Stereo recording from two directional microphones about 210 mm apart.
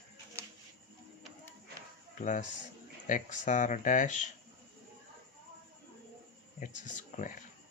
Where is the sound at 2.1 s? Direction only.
35° left (ahead or behind).